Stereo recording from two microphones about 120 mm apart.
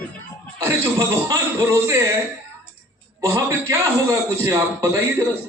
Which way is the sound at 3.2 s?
25° right (ahead or behind).